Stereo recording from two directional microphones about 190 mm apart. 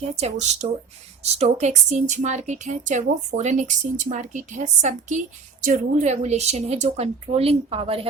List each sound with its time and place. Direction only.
0.2 s speech: 35° right (ahead or behind)